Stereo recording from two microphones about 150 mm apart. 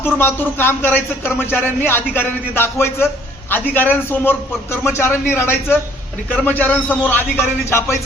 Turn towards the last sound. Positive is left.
turn(degrees=20)  # may be behind; listen again after turning